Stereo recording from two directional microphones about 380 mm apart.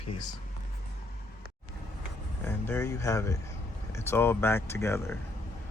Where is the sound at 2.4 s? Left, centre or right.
Centre.